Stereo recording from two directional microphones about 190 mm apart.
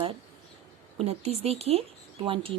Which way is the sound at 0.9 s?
35° right (ahead or behind).